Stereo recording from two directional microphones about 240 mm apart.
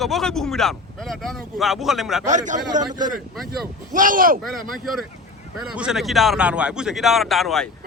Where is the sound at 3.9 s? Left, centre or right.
Right.